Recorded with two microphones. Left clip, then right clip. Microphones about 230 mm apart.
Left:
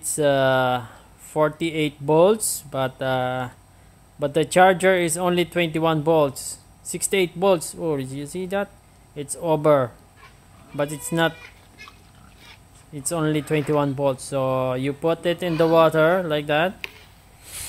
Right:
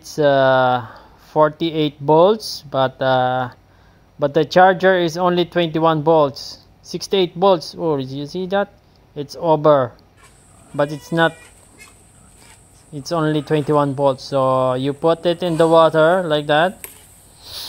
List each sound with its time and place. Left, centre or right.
0.1 s speech: centre
6.3 s a sound: centre
6.9 s speech: centre
7.5 s speech: centre
7.8 s speech: centre
8.1 s speech: centre
8.4 s speech: centre
13.1 s speech: centre